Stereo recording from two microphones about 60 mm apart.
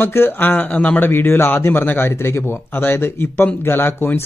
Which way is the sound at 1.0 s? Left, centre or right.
Left.